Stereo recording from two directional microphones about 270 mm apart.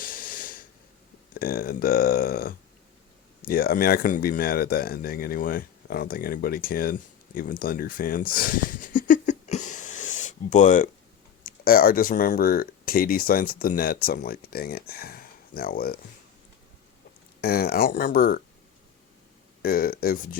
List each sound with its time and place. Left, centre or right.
0.0 s a sound: left
1.3 s speech: left
7.3 s a sound: left
11.4 s speech: left
17.4 s speech: left
19.6 s speech: left